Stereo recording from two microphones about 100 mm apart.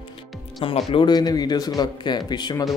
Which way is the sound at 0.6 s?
65° left (ahead or behind).